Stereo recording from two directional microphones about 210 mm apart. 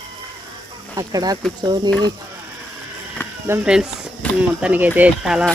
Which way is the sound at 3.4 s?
5° right (ahead or behind).